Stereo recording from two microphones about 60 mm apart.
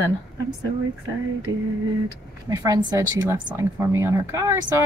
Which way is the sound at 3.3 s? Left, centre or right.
Right.